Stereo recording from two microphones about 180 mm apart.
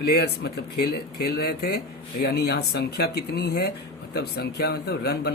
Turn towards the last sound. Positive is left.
turn(degrees=65)  # may be behind; listen again after turning